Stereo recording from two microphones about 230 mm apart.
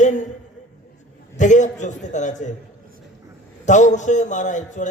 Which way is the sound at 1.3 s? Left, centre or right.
Left.